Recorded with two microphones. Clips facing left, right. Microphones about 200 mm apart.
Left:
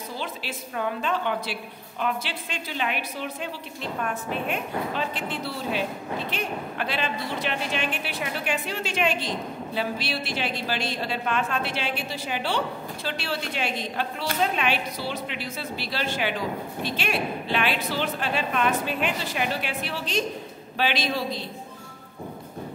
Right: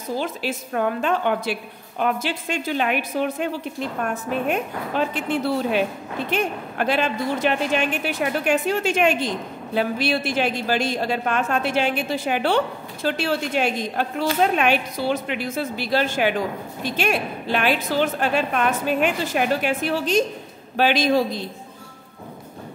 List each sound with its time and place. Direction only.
0.1 s a woman's voice: 45° right (ahead or behind)